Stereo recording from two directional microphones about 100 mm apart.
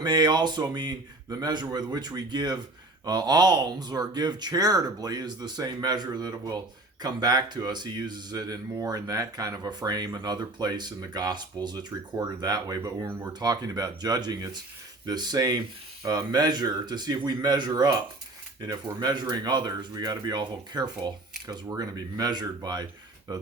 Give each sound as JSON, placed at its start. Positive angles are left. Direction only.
{"t": 0.0, "sound": "speech", "side_deg": -45}
{"t": 13.1, "sound": "speech", "side_deg": -20}
{"t": 13.3, "sound": "speech", "side_deg": -40}